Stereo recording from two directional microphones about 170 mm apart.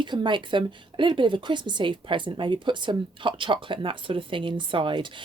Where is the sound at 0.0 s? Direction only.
25° right (ahead or behind).